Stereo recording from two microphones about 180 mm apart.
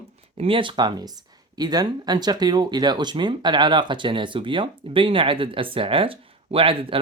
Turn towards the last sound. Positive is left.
turn(degrees=-30)  # may be behind; listen again after turning